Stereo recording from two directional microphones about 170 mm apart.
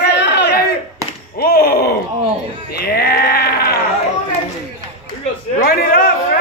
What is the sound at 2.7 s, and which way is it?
Sheep, 65° left (ahead or behind).